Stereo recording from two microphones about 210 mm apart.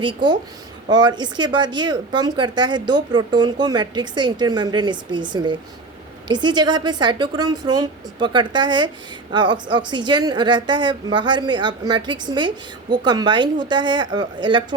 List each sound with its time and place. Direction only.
0.0 s a woman's voice: 20° right (ahead or behind)